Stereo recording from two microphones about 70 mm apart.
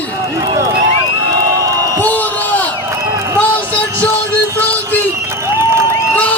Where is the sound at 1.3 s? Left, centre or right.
Right.